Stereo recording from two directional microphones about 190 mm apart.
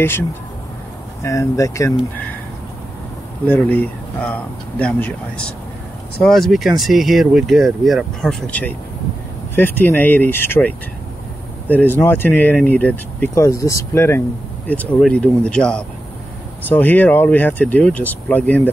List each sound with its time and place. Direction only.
1.2 s speech: 15° left (ahead or behind)
3.4 s speech: 10° left (ahead or behind)